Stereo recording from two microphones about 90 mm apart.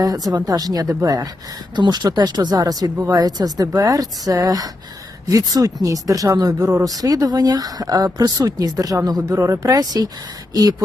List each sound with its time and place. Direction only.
0.0 s speech: 45° right (ahead or behind)
1.7 s speech: 55° right (ahead or behind)